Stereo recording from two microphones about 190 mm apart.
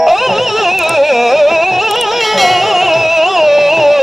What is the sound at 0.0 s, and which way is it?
Music, centre (ahead or behind).